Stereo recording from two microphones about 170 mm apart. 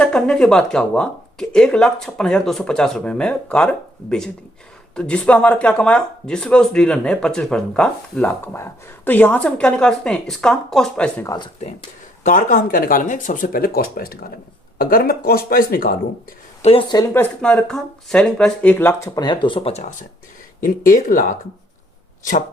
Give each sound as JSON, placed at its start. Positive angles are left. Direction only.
{"t": 0.0, "sound": "speech", "side_deg": 5}
{"t": 12.2, "sound": "speech", "side_deg": 50}
{"t": 17.2, "sound": "speech", "side_deg": 5}
{"t": 20.6, "sound": "speech", "side_deg": 55}